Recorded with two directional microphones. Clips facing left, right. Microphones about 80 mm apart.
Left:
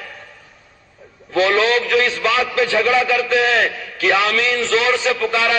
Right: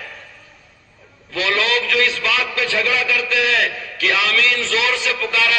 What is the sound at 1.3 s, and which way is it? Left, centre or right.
A man's voice, left.